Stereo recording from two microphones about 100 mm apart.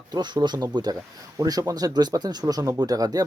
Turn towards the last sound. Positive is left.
turn(degrees=-40)  # may be behind; listen again after turning